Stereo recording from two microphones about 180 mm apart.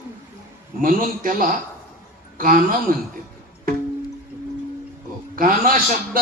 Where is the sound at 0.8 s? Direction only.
50° right (ahead or behind).